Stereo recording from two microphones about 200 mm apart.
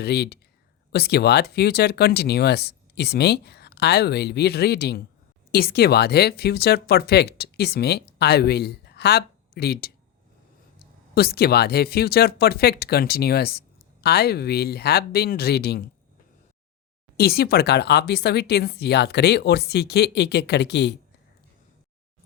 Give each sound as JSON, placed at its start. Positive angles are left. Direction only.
{"t": 0.0, "sound": "speech", "side_deg": 55}
{"t": 17.2, "sound": "speech", "side_deg": 50}